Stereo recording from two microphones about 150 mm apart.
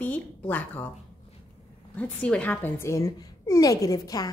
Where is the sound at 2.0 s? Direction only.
10° left (ahead or behind).